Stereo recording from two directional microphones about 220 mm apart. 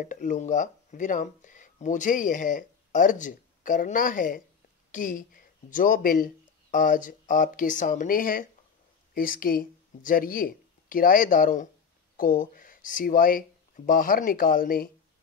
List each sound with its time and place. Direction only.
0.0 s speech: 35° left (ahead or behind)